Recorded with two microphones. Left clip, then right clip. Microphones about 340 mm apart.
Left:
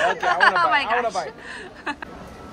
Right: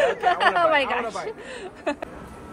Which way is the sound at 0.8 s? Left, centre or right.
Left.